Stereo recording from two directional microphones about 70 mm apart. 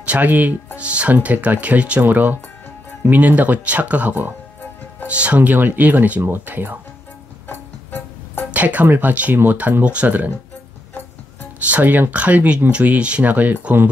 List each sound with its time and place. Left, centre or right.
0.0 s speech: right
7.4 s music: left
8.5 s speech: right
11.7 s speech: right